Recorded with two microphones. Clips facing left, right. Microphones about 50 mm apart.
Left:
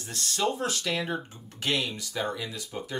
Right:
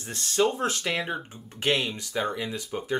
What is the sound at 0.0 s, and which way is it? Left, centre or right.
Speech, right.